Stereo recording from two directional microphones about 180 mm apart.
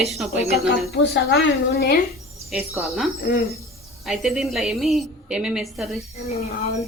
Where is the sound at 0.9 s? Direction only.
60° left (ahead or behind).